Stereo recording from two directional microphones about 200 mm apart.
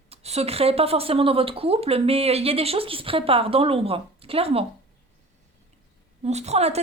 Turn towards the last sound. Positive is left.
turn(degrees=-30)  # may be behind; listen again after turning